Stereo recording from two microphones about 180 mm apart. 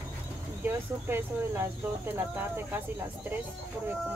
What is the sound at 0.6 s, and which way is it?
Speech, 10° right (ahead or behind).